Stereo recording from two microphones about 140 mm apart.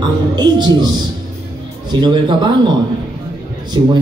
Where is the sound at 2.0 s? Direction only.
30° right (ahead or behind).